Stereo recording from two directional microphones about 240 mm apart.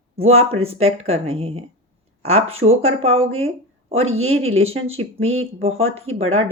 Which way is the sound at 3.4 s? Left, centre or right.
Right.